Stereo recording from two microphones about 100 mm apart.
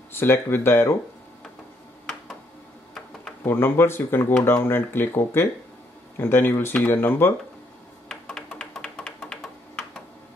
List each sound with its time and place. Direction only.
0.1 s speech: 20° left (ahead or behind)
3.4 s speech: 20° left (ahead or behind)
8.1 s a sound: 5° left (ahead or behind)